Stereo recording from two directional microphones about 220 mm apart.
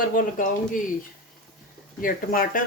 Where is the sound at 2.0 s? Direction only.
40° left (ahead or behind).